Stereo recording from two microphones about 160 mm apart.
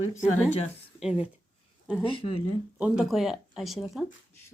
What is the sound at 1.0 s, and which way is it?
Speech, 5° right (ahead or behind).